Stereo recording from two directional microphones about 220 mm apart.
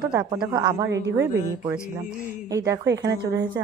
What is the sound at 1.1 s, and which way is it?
Speech, 15° right (ahead or behind).